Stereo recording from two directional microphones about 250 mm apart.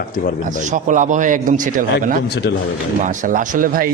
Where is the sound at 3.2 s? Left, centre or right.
Right.